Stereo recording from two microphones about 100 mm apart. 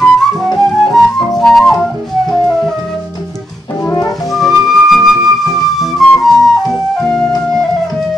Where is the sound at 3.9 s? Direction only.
35° left (ahead or behind).